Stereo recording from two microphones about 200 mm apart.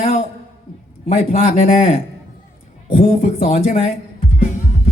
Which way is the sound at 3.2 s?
45° left (ahead or behind).